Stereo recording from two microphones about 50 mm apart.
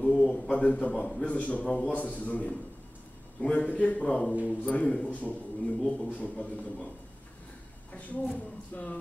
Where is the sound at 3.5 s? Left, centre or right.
Left.